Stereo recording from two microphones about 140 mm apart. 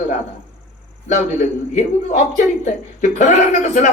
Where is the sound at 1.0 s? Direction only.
65° left (ahead or behind).